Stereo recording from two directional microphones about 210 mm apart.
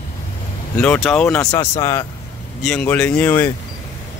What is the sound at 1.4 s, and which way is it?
Speech, 15° left (ahead or behind).